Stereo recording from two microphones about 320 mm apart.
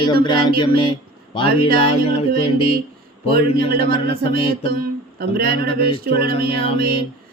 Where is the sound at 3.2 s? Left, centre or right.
Right.